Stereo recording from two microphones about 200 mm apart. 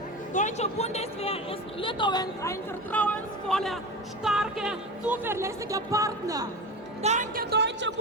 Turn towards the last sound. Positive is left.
turn(degrees=-60)  # may be behind; listen again after turning